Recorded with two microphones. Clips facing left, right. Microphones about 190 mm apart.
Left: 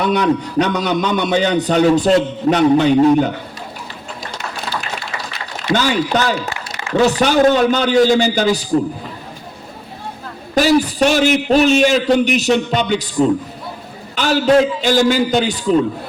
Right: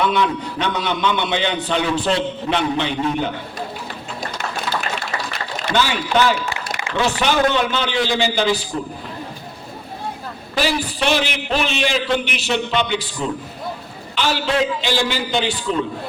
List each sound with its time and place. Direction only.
0.0 s a man's voice: 40° left (ahead or behind)
5.7 s a man's voice: 45° left (ahead or behind)
10.5 s a man's voice: 45° left (ahead or behind)
14.2 s a man's voice: 45° left (ahead or behind)